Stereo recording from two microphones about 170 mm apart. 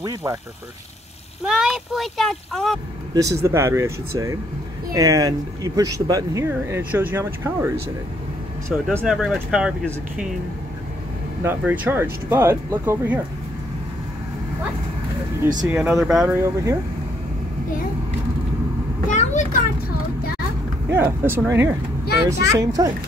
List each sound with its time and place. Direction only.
0.0 s speech: 20° right (ahead or behind)
1.4 s speech: 5° right (ahead or behind)
3.4 s speech: 15° right (ahead or behind)
11.4 s speech: 10° right (ahead or behind)
15.7 s speech: 15° right (ahead or behind)
16.0 s speech: centre (ahead or behind)
16.3 s speech: 15° right (ahead or behind)
19.0 s vehicle: 45° left (ahead or behind)
20.9 s speech: 15° right (ahead or behind)